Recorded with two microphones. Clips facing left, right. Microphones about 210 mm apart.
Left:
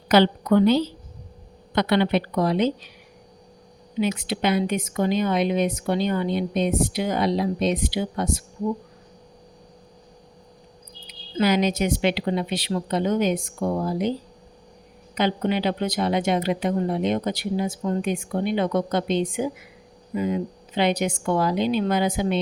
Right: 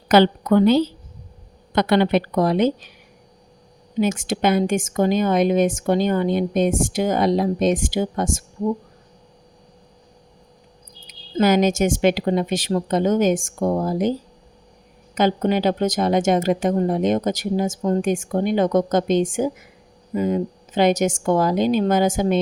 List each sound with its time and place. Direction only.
0.1 s speech: 50° right (ahead or behind)
3.9 s speech: 45° right (ahead or behind)
11.0 s speech: 45° right (ahead or behind)